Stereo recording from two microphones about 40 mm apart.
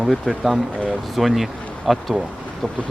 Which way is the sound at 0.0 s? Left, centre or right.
Centre.